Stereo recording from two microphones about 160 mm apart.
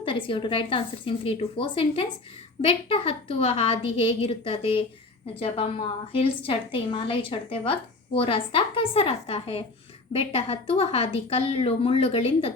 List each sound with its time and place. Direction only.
0.0 s a woman's voice: 30° left (ahead or behind)